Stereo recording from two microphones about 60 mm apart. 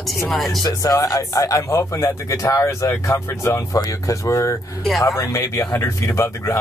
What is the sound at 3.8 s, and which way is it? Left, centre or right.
Speech, left.